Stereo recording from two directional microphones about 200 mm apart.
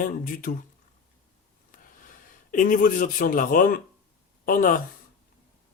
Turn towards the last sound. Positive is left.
turn(degrees=45)  # may be behind; listen again after turning